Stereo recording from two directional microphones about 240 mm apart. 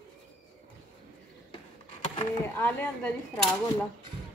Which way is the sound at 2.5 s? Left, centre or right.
Centre.